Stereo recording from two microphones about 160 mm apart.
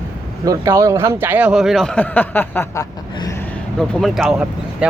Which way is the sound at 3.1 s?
25° left (ahead or behind).